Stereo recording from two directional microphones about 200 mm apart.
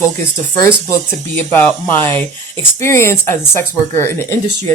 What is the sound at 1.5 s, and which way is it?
Speech, 10° left (ahead or behind).